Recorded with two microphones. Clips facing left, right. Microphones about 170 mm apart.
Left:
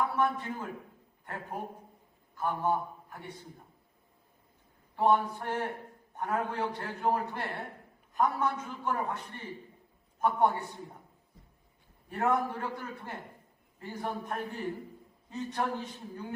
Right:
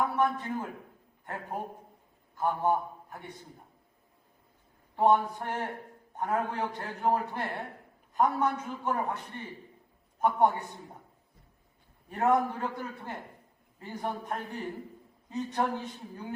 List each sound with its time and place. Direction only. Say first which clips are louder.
0.0 s a man's voice: right 1 dB; 15° right (ahead or behind)
4.9 s a man's voice: right 2 dB; 15° right (ahead or behind)
12.0 s a man's voice: right 3 dB; 15° right (ahead or behind)